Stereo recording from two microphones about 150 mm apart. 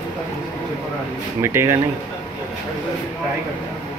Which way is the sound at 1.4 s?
15° right (ahead or behind).